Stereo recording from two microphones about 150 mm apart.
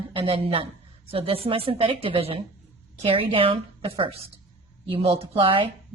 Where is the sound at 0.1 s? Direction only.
35° right (ahead or behind).